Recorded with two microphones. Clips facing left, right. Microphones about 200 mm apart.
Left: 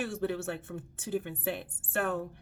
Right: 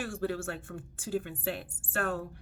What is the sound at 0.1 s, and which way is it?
Speech, 20° left (ahead or behind).